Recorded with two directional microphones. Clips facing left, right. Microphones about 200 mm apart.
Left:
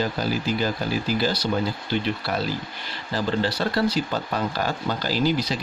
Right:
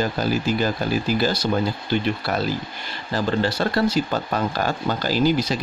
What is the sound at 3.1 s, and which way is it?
Speech, 50° right (ahead or behind).